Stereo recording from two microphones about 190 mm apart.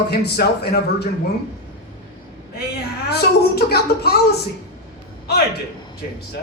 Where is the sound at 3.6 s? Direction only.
55° left (ahead or behind).